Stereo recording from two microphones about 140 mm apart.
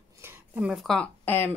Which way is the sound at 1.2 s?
15° left (ahead or behind).